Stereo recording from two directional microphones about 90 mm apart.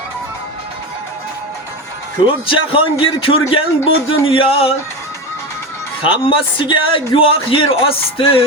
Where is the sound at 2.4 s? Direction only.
80° left.